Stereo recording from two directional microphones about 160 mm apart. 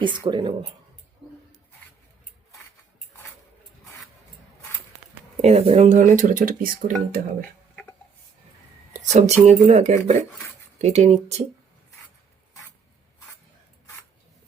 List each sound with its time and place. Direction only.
0.3 s speech: 30° right (ahead or behind)
5.4 s speech: 40° right (ahead or behind); by 6.9 s 60° right (ahead or behind)
8.9 s speech: 45° right (ahead or behind)